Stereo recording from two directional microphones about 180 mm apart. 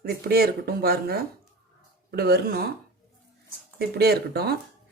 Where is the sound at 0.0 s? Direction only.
60° right (ahead or behind).